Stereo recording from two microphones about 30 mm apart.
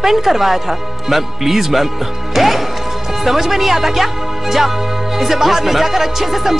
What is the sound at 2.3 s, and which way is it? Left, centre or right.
Music, centre.